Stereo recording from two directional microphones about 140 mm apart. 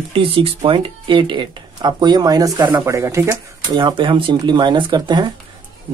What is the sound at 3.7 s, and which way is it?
Speech, 35° right (ahead or behind).